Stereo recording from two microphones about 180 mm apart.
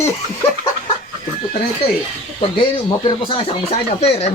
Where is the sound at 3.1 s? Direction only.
30° left (ahead or behind).